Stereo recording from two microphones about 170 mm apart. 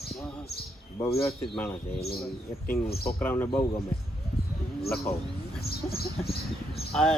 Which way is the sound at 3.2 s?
10° left (ahead or behind).